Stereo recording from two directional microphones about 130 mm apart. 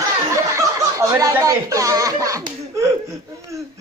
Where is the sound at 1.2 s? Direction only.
25° right (ahead or behind).